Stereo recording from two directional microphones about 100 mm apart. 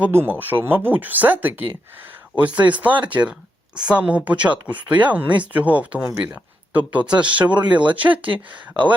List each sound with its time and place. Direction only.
0.0 s speech: 20° right (ahead or behind)